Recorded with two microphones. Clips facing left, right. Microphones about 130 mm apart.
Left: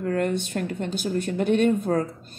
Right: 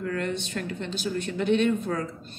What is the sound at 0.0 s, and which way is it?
Speech, 50° left (ahead or behind).